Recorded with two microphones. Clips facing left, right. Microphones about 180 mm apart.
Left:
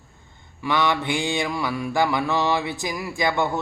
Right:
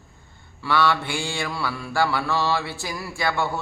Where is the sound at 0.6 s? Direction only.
20° left (ahead or behind).